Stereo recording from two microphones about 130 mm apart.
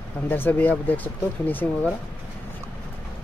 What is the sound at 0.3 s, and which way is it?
Speech, 15° left (ahead or behind).